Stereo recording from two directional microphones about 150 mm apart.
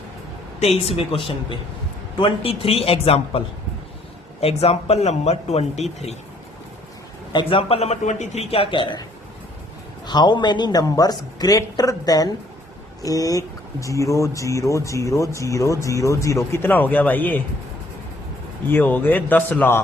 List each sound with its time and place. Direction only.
0.9 s a man's voice: 35° left (ahead or behind)
7.3 s a man's voice: 40° left (ahead or behind)
10.1 s speech: 30° left (ahead or behind); by 17.4 s 15° left (ahead or behind)
18.7 s a man's voice: 10° left (ahead or behind)